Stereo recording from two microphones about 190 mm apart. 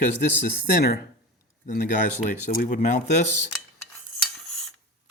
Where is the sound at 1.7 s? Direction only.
40° left (ahead or behind).